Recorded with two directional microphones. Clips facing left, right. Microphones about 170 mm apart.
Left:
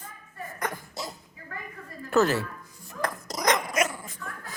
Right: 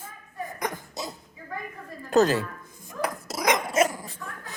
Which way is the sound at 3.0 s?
10° right (ahead or behind).